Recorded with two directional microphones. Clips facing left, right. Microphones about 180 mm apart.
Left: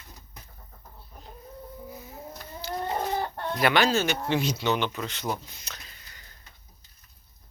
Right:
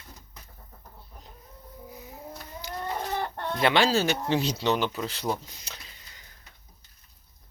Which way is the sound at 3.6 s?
25° right (ahead or behind).